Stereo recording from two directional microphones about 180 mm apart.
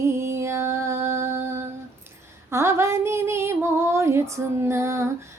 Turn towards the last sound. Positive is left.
turn(degrees=-15)  # may be behind; listen again after turning